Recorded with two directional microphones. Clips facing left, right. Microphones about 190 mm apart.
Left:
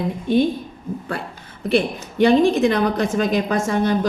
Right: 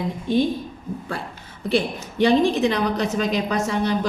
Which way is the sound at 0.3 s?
60° left (ahead or behind).